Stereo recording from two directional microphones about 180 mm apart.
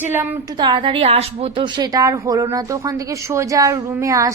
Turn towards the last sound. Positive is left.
turn(degrees=-20)  # may be behind; listen again after turning